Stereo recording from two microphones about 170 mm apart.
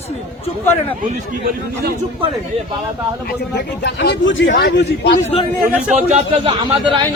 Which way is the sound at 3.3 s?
80° left.